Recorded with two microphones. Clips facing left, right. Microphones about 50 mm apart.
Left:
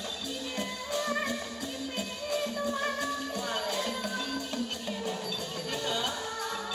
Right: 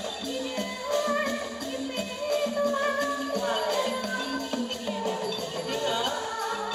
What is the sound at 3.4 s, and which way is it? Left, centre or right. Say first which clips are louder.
Music: right 6 dB; centre.